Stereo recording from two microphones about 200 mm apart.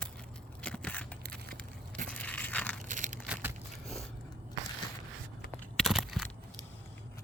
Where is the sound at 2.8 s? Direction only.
40° right (ahead or behind).